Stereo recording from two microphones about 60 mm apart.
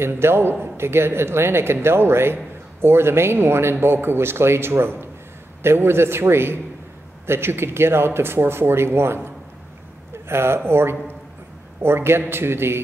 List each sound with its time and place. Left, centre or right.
0.0 s speech: right